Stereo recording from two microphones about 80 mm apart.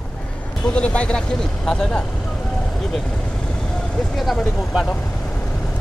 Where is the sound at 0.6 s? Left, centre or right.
Centre.